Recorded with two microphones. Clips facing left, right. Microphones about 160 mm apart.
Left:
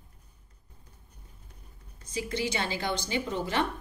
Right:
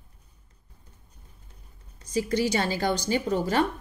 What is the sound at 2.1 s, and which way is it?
A woman's voice, 40° right (ahead or behind).